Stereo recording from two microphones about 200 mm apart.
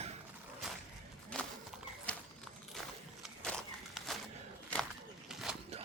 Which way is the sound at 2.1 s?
5° left (ahead or behind).